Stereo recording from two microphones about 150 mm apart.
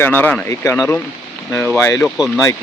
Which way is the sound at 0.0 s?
10° left (ahead or behind).